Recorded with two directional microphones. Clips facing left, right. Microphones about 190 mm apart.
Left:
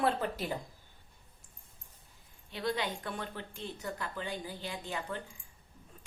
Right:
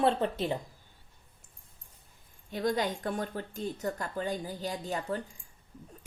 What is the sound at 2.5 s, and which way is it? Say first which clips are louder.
Speech: right 5 dB; 45° right (ahead or behind).